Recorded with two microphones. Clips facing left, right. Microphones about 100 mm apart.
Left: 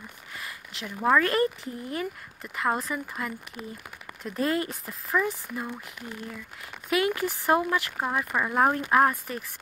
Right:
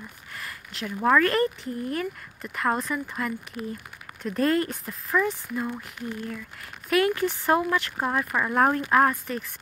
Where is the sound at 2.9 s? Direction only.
5° left (ahead or behind).